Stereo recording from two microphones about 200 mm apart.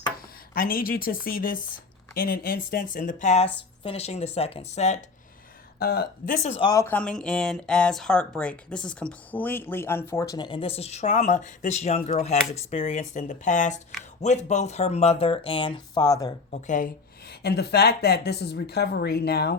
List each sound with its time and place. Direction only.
0.2 s speech: 45° left (ahead or behind)
5.8 s speech: 50° left (ahead or behind)
6.5 s speech: 25° left (ahead or behind)
16.5 s speech: 40° left (ahead or behind)